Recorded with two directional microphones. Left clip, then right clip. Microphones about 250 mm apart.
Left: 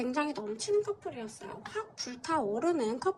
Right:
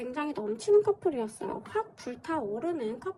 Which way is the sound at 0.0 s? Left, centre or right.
Centre.